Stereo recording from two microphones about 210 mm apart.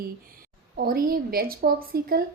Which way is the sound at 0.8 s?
45° right (ahead or behind).